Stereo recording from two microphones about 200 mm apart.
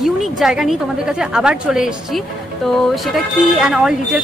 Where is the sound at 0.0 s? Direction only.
Centre (ahead or behind).